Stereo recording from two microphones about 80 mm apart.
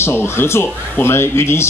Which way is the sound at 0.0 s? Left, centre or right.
Left.